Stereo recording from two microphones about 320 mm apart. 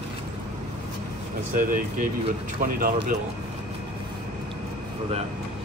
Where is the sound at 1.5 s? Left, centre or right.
Right.